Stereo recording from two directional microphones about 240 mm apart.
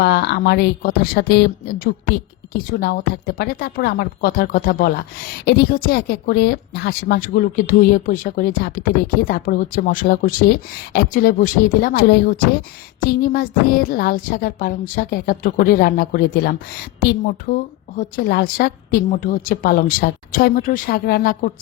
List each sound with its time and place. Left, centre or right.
0.0 s speech: left